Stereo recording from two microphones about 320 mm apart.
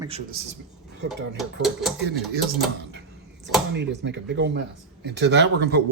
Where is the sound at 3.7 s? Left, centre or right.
Right.